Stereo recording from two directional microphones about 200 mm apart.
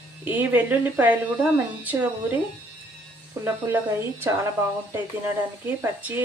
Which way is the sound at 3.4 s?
10° right (ahead or behind).